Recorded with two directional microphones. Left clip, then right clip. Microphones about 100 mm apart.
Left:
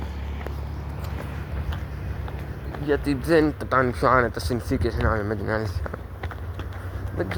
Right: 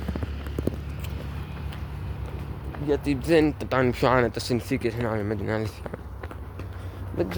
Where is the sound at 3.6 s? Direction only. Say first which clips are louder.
Left 2 dB; 90° right.